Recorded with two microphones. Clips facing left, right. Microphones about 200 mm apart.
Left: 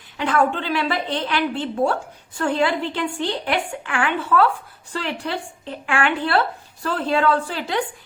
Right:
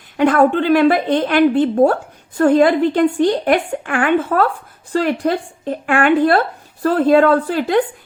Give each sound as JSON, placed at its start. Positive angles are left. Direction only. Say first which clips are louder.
{"t": 0.2, "sound": "a woman's voice", "louder": "right 8 dB", "side_deg": -45}